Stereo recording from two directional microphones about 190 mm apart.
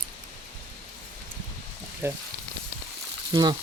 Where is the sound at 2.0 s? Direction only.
10° right (ahead or behind).